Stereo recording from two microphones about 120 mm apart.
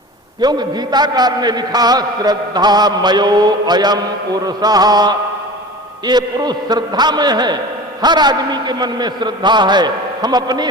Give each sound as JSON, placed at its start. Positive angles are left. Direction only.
{"t": 0.4, "sound": "a man's voice", "side_deg": -35}